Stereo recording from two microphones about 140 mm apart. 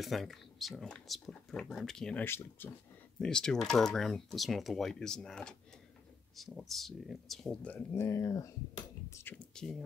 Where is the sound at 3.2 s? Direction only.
5° left (ahead or behind); by 9.3 s 20° left (ahead or behind).